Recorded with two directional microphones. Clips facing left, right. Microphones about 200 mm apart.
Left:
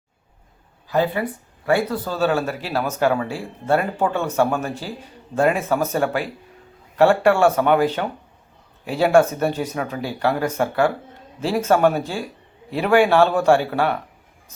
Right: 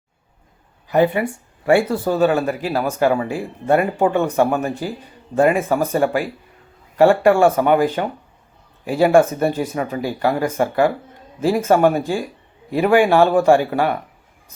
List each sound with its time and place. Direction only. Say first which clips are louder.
0.9 s speech: right 4 dB; 20° right (ahead or behind)
2.1 s speech: right 3 dB; 15° right (ahead or behind)